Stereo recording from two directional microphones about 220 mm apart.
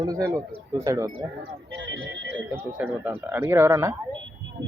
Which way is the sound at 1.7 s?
55° right (ahead or behind).